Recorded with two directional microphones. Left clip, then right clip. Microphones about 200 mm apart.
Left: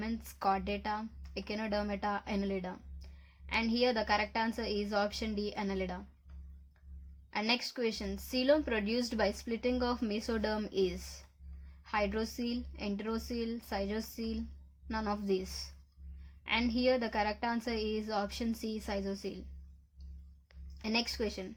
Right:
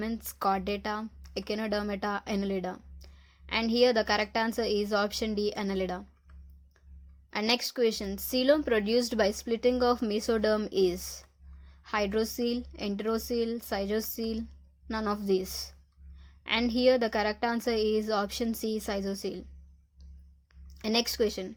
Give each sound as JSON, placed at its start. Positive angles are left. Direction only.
{"t": 0.0, "sound": "speech", "side_deg": -30}
{"t": 7.3, "sound": "speech", "side_deg": -35}
{"t": 20.7, "sound": "speech", "side_deg": -35}